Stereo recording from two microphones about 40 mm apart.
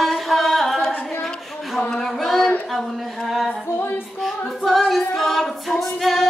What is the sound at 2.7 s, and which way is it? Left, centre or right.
Speech, centre.